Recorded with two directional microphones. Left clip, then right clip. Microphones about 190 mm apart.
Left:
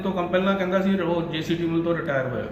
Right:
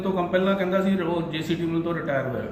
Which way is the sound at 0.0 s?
Centre (ahead or behind).